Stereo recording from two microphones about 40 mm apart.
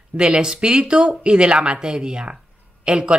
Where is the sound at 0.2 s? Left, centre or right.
Right.